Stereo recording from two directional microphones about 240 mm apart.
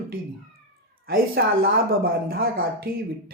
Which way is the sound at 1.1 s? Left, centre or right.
Right.